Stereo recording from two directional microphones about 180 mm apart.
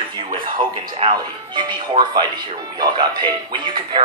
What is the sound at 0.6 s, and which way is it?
Speech, 30° right (ahead or behind).